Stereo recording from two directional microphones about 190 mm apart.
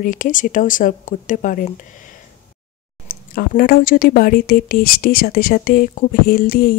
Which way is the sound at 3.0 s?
50° left (ahead or behind).